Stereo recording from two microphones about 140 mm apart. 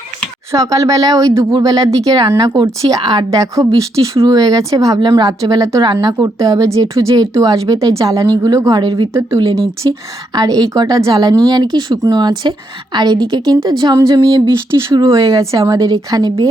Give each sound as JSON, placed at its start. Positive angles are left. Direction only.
{"t": 0.5, "sound": "speech", "side_deg": -25}